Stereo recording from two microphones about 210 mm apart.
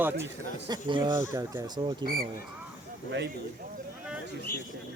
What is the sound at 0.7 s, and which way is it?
Speech, 20° right (ahead or behind).